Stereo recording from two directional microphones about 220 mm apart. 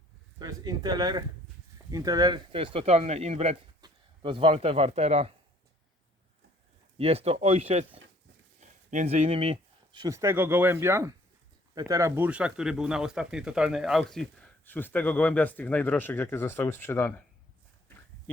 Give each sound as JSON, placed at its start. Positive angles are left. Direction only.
{"t": 0.3, "sound": "speech", "side_deg": -20}
{"t": 7.0, "sound": "speech", "side_deg": -25}